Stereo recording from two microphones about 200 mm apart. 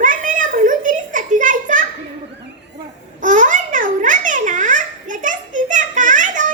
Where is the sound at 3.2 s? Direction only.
40° right (ahead or behind).